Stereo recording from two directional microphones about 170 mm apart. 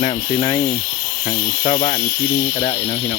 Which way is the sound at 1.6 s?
35° left (ahead or behind).